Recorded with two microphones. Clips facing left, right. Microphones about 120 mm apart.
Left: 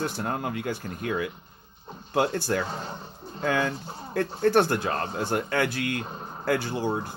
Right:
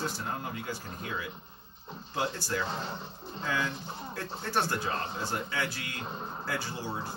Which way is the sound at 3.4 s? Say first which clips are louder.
Left 7 dB; 55° left (ahead or behind).